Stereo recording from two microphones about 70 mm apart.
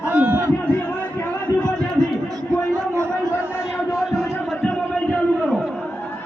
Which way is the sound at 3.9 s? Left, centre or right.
Centre.